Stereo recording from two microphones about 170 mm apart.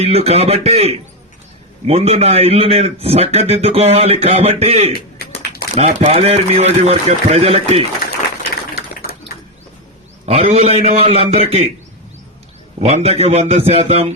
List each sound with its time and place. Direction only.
0.0 s a man's voice: 35° right (ahead or behind)
5.2 s a sound: 70° left (ahead or behind)
5.7 s a man's voice: 40° right (ahead or behind)
10.2 s a man's voice: 35° right (ahead or behind)
12.8 s a man's voice: 40° right (ahead or behind)